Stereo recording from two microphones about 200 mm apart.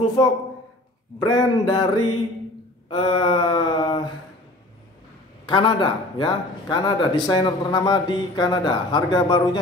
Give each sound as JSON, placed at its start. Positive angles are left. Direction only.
{"t": 0.2, "sound": "speech", "side_deg": 20}
{"t": 2.9, "sound": "speech", "side_deg": 25}
{"t": 5.5, "sound": "speech", "side_deg": 20}